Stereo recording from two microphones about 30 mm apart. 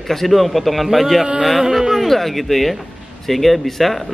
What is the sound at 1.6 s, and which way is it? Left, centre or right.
Speech, centre.